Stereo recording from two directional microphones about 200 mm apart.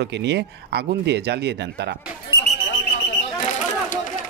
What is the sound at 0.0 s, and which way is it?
Speech, 60° right (ahead or behind).